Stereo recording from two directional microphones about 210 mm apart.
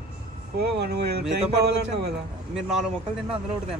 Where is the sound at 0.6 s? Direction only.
50° right (ahead or behind).